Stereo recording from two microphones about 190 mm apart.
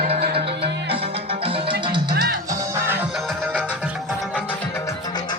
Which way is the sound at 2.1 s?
55° right (ahead or behind).